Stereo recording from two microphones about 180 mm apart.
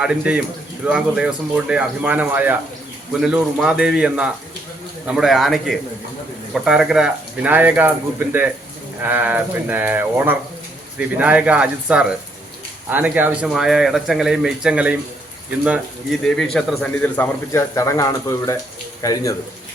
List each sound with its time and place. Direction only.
0.0 s speech: 5° right (ahead or behind)
16.2 s a man's voice: 5° left (ahead or behind); by 19.3 s 20° left (ahead or behind)